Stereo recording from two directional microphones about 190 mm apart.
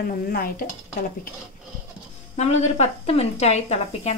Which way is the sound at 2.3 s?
35° left (ahead or behind).